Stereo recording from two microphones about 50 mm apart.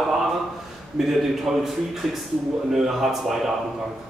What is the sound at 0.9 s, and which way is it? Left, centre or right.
A man's voice, centre.